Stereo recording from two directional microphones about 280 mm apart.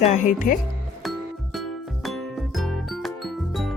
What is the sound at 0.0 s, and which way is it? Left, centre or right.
Speech, left.